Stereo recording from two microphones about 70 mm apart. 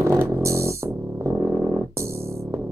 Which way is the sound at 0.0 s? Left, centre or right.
Right.